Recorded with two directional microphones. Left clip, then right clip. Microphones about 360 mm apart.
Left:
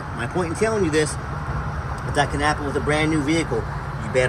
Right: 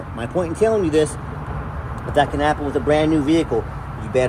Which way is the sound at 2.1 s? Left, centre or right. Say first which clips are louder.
Right 4 dB; centre.